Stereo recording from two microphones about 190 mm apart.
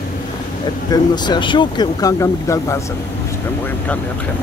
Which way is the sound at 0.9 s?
20° left (ahead or behind).